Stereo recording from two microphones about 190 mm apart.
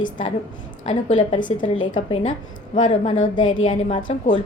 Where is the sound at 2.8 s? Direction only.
40° left (ahead or behind).